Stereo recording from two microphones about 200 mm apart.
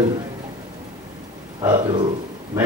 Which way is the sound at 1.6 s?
20° right (ahead or behind).